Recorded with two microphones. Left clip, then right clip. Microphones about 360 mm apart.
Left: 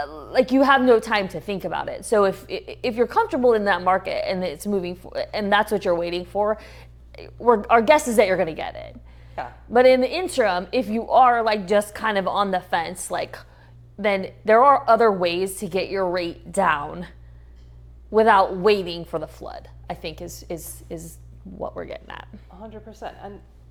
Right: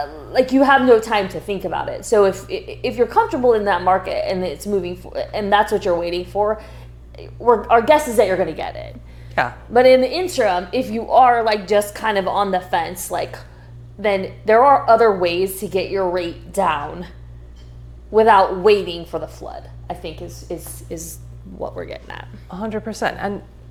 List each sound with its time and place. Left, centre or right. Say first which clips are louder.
0.0 s a woman's voice: right 3 dB; left
9.4 s speech: right 12 dB; right
9.7 s a woman's voice: right 4 dB; left
18.1 s a woman's voice: right 4 dB; left
20.5 s a woman's voice: right 4 dB; left
22.4 s a woman's voice: right 14 dB; right